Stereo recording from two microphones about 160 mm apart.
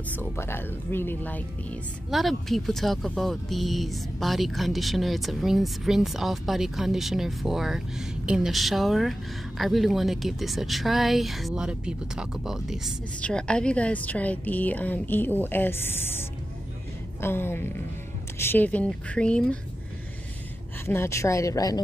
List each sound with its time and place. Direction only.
0.1 s speech: 15° left (ahead or behind)
2.0 s speech: centre (ahead or behind)
20.8 s a woman's voice: 15° left (ahead or behind)